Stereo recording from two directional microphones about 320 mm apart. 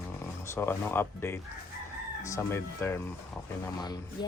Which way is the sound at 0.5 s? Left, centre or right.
Centre.